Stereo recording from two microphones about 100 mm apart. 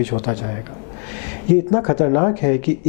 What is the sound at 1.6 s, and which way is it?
Speech, 15° left (ahead or behind).